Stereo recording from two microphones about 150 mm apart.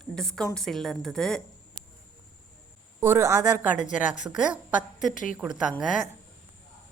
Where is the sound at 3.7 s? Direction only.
55° left (ahead or behind).